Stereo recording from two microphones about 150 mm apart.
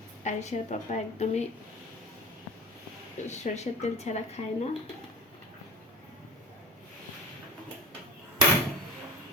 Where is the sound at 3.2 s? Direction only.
50° left (ahead or behind).